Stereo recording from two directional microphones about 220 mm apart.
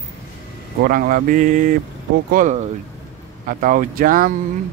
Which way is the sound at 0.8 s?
40° right (ahead or behind).